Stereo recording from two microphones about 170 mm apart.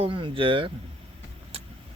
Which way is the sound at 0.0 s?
30° right (ahead or behind).